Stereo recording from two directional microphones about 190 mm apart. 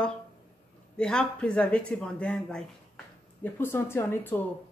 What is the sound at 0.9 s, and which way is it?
Speech, 5° left (ahead or behind).